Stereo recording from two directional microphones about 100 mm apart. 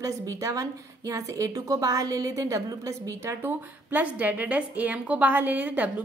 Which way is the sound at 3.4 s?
15° right (ahead or behind).